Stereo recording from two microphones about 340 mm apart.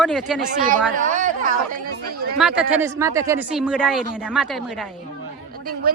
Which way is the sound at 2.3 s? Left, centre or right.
Centre.